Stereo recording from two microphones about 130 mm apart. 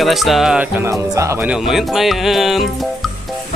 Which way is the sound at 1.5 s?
Centre (ahead or behind).